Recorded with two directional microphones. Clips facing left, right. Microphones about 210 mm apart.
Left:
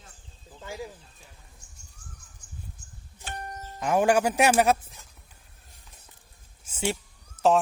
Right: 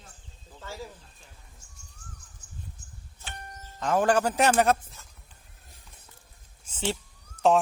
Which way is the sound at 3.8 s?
10° left (ahead or behind).